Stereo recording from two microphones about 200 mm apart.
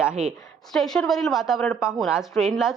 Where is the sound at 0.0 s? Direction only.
5° right (ahead or behind).